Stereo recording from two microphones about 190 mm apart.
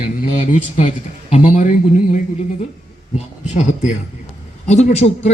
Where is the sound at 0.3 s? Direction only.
35° left (ahead or behind).